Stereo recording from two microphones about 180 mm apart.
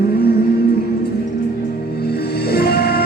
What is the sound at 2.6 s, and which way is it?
Music, 60° left (ahead or behind).